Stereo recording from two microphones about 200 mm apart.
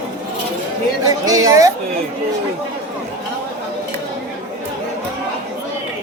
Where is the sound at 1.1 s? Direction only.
20° right (ahead or behind).